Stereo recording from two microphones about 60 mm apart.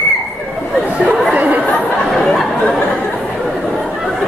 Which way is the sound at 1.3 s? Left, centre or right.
Right.